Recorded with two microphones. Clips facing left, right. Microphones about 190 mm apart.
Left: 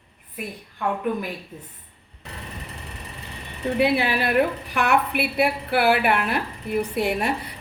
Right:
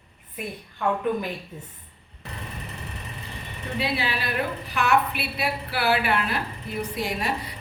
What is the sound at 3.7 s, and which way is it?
A woman's voice, 55° left (ahead or behind).